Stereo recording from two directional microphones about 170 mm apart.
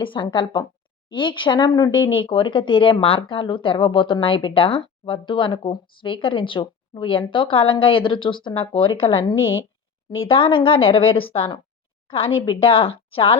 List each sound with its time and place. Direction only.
0.0 s a woman's voice: 30° left (ahead or behind)